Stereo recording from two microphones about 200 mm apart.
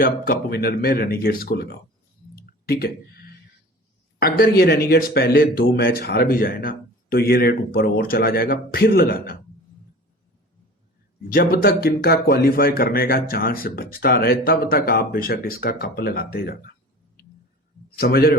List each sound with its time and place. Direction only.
0.0 s speech: 50° left (ahead or behind)
2.3 s a sound: 50° left (ahead or behind)
4.2 s speech: 50° left (ahead or behind)
11.3 s speech: 45° left (ahead or behind)
17.9 s a man's voice: 50° left (ahead or behind)